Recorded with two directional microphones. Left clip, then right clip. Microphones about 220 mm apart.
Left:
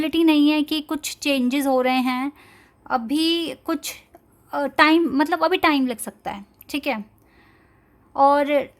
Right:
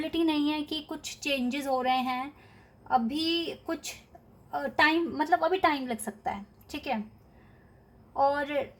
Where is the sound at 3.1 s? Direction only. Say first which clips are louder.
Left 8 dB; 50° left (ahead or behind).